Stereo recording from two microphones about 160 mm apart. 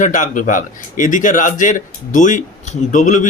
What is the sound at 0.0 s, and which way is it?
Speech, 55° left (ahead or behind).